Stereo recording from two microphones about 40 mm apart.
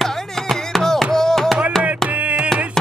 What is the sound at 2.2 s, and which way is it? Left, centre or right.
Music, right.